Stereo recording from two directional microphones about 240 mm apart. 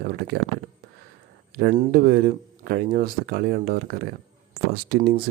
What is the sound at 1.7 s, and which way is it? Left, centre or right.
Speech, right.